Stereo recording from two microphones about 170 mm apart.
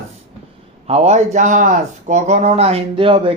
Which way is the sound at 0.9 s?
35° right (ahead or behind).